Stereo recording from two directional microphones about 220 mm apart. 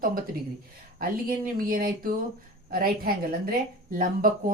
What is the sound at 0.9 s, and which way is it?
Speech, 40° right (ahead or behind).